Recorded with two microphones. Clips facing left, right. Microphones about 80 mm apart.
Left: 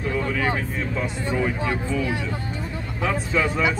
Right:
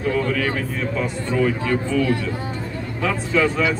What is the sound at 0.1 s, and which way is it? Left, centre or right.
Speech, centre.